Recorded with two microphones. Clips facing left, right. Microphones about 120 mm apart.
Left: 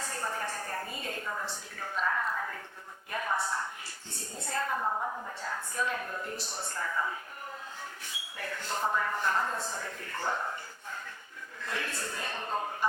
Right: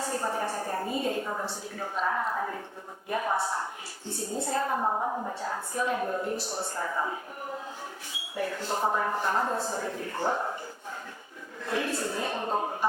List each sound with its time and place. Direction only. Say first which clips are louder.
0.1 s a sound: right 4 dB; 25° right (ahead or behind)
2.0 s speech: right 3 dB; 25° right (ahead or behind)
4.4 s speech: right 3 dB; 25° right (ahead or behind)
8.4 s speech: right 5 dB; 30° right (ahead or behind)
11.7 s speech: right 8 dB; 25° right (ahead or behind)